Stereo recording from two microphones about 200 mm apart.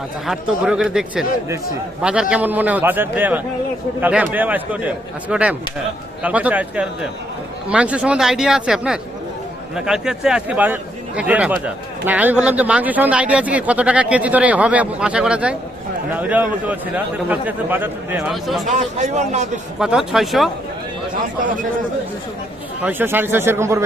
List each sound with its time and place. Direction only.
0.3 s speech: 5° right (ahead or behind)
18.6 s a man's voice: 35° right (ahead or behind)
19.8 s speech: centre (ahead or behind)
22.8 s speech: 10° right (ahead or behind)